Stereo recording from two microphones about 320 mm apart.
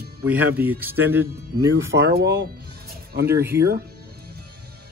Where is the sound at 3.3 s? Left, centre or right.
Centre.